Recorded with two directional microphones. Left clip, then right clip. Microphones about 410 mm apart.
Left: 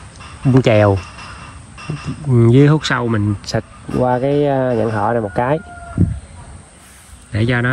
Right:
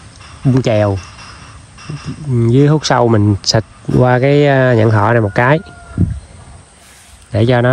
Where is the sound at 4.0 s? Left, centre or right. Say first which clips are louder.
Right 4 dB; centre.